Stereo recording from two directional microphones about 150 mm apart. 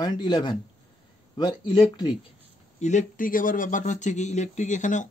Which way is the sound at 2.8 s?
55° left (ahead or behind).